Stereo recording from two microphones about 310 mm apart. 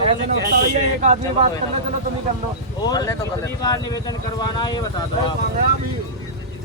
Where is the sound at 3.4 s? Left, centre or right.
Centre.